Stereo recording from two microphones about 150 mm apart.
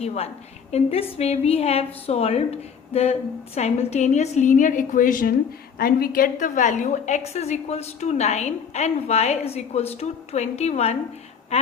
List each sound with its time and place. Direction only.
0.0 s a woman's voice: 45° left (ahead or behind); by 5.3 s 65° left (ahead or behind)
5.8 s a woman's voice: 75° left (ahead or behind); by 10.9 s 45° left (ahead or behind)
11.5 s a sound: 45° left (ahead or behind)